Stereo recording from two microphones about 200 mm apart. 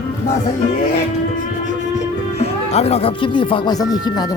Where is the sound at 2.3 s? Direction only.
30° left (ahead or behind).